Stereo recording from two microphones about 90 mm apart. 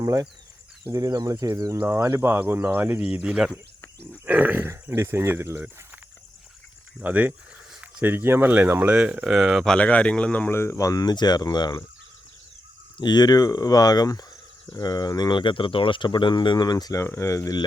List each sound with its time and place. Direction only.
0.0 s speech: 40° right (ahead or behind)
1.8 s speech: 25° right (ahead or behind)
4.7 s speech: 30° right (ahead or behind)
7.0 s speech: 15° right (ahead or behind)
7.7 s a sound: 10° right (ahead or behind)
8.0 s speech: 25° right (ahead or behind)
8.9 s speech: 10° right (ahead or behind)
9.7 s speech: 15° left (ahead or behind); by 11.7 s 50° left (ahead or behind)
13.0 s speech: 50° left (ahead or behind); by 17.5 s 35° left (ahead or behind)